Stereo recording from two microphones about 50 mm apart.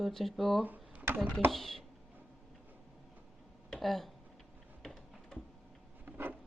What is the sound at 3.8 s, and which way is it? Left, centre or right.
Speech, centre.